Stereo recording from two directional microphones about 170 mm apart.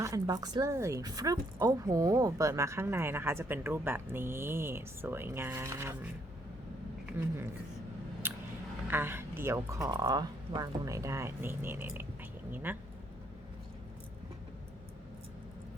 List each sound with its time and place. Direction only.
0.0 s speech: 20° right (ahead or behind)
7.2 s speech: 15° right (ahead or behind)
8.2 s a sound: 15° right (ahead or behind)
8.9 s speech: 15° right (ahead or behind)